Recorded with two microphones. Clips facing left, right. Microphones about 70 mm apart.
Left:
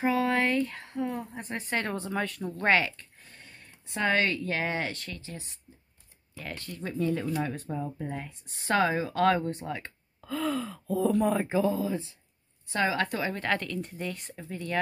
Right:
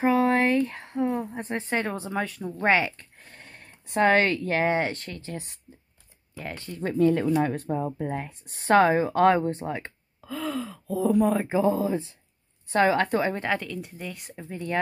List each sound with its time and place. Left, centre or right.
0.0 s a sound: right
1.3 s a woman's voice: right
1.9 s speech: centre
3.3 s speech: right
6.3 s speech: right
6.8 s speech: right
10.2 s speech: centre
11.4 s speech: right
13.4 s speech: centre
14.4 s speech: centre